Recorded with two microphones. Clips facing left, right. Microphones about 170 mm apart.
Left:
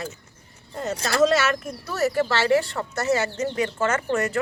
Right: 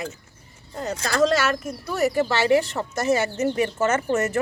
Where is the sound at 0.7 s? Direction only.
Centre (ahead or behind).